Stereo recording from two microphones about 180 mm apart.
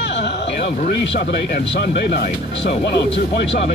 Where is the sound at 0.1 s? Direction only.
70° left (ahead or behind).